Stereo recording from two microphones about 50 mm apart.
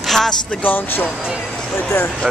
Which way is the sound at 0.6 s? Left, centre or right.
Left.